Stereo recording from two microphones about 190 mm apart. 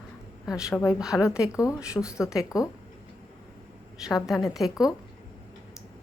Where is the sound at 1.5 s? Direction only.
15° left (ahead or behind).